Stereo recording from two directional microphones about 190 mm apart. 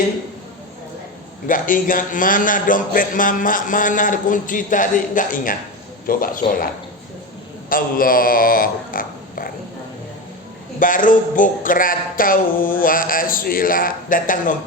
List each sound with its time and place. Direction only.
1.5 s a man's voice: 45° left (ahead or behind)
7.7 s speech: 50° left (ahead or behind)
10.8 s a man's voice: 45° left (ahead or behind)